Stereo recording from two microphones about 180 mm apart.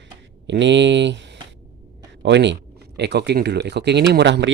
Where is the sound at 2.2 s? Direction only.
75° right (ahead or behind).